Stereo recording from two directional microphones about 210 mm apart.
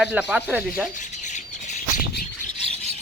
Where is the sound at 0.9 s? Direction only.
35° left (ahead or behind).